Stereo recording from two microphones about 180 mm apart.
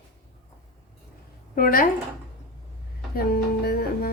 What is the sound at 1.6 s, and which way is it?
Speech, 50° left (ahead or behind).